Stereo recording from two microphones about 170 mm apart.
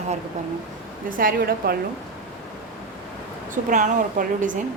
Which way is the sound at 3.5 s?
50° right (ahead or behind).